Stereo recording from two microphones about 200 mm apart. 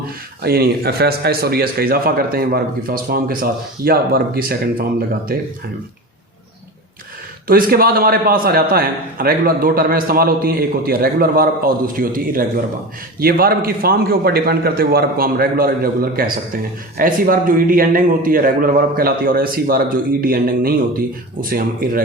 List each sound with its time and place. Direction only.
0.4 s a man's voice: 50° right (ahead or behind)
7.4 s a man's voice: 45° right (ahead or behind)